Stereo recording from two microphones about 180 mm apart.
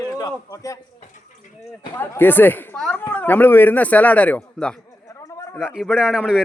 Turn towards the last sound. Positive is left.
turn(degrees=-5)  # may be behind; listen again after turning